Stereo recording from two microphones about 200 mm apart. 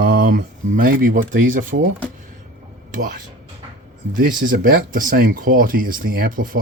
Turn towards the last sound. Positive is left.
turn(degrees=-45)  # may be behind; listen again after turning